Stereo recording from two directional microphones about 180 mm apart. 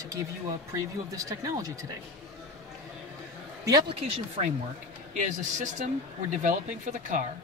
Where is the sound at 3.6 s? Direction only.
25° right (ahead or behind).